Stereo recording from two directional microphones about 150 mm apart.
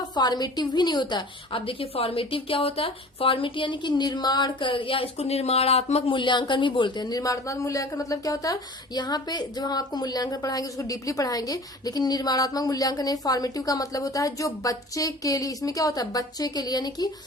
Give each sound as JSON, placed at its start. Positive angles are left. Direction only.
{"t": 0.1, "sound": "a woman's voice", "side_deg": 30}